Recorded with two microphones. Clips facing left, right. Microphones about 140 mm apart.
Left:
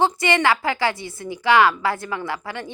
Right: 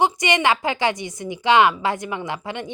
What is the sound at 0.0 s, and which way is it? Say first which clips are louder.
A woman's voice: even; 15° right (ahead or behind).